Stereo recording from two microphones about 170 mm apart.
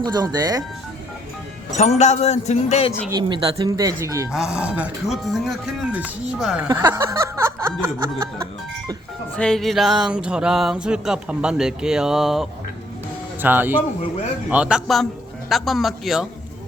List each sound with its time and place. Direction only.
0.0 s speech: 25° right (ahead or behind)
1.7 s speech: 45° left (ahead or behind)
3.1 s speech: 25° right (ahead or behind)
4.3 s music: 5° right (ahead or behind)
6.7 s a sound: 15° right (ahead or behind)
9.3 s music: 5° left (ahead or behind)
13.4 s speech: 10° right (ahead or behind)
14.5 s music: 5° right (ahead or behind)